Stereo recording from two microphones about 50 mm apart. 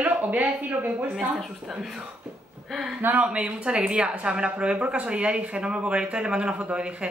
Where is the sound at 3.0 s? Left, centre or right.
Right.